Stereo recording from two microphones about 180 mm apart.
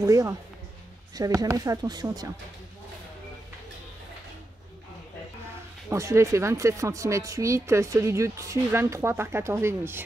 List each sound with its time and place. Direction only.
0.0 s speech: 20° right (ahead or behind)
5.9 s speech: 15° right (ahead or behind)